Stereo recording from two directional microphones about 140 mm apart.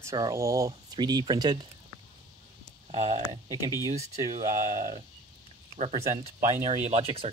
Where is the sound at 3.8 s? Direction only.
25° right (ahead or behind).